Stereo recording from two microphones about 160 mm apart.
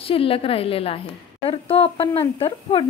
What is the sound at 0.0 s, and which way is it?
A woman's voice, 35° left (ahead or behind).